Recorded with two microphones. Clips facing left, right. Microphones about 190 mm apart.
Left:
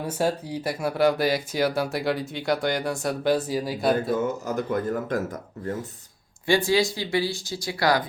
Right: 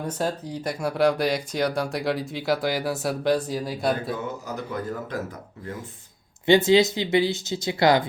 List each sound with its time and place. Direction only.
0.0 s speech: 10° left (ahead or behind)
4.1 s speech: 50° left (ahead or behind)
6.4 s speech: 20° right (ahead or behind)